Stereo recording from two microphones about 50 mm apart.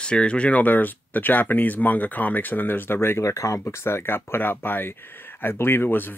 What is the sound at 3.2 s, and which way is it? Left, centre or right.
Speech, left.